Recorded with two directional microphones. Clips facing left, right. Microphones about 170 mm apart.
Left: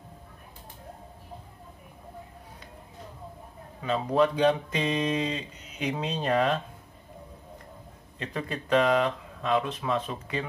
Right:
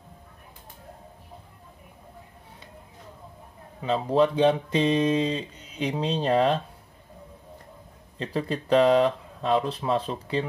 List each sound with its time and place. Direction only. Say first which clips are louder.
3.8 s speech: right 2 dB; 25° right (ahead or behind)
8.2 s speech: right 5 dB; 30° right (ahead or behind)